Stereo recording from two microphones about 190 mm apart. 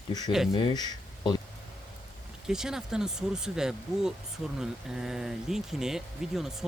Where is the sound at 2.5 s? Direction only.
5° right (ahead or behind).